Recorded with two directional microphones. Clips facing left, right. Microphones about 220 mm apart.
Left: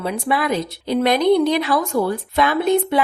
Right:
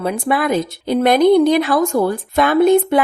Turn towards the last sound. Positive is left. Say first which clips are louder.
# right 5 dB
turn(degrees=-50)  # may be behind; listen again after turning